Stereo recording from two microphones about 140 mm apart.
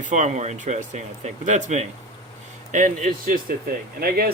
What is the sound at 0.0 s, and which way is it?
Speech, 60° right (ahead or behind).